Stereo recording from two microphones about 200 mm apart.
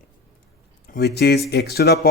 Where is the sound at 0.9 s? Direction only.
55° left (ahead or behind).